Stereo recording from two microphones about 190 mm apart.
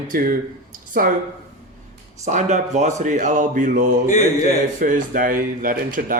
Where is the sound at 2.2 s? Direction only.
40° right (ahead or behind).